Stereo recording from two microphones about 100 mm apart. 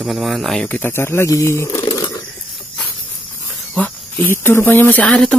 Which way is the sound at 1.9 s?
35° left (ahead or behind).